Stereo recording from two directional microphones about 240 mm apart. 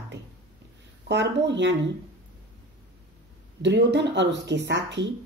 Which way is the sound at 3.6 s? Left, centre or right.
Right.